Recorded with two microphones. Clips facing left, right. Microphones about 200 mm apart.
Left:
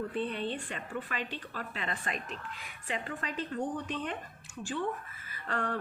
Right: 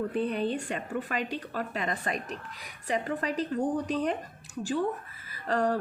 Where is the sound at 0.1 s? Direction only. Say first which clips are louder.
Right 5 dB; 40° right (ahead or behind).